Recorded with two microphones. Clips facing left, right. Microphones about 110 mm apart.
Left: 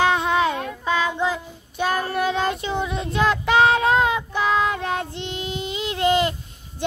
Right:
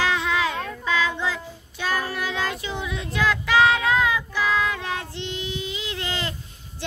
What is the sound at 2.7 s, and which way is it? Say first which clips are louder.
Child singing: left 5 dB; 45° left (ahead or behind).